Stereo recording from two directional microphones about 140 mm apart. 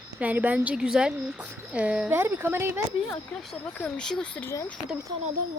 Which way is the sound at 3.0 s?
5° left (ahead or behind).